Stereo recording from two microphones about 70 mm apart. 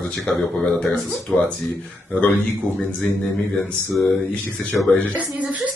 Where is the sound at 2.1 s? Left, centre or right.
Centre.